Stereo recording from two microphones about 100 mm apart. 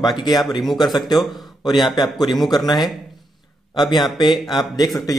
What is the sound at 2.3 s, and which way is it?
Speech, centre (ahead or behind).